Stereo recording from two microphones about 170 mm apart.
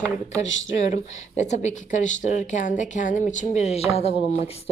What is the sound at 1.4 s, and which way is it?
Speech, 45° left (ahead or behind).